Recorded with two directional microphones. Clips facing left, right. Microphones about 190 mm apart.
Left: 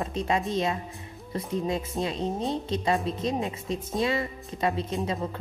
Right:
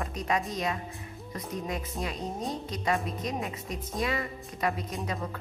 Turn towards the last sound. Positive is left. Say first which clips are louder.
# left 5 dB
turn(degrees=25)  # may be behind; listen again after turning